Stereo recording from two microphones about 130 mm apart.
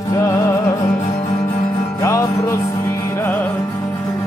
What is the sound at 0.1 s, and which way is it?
Music, 25° left (ahead or behind).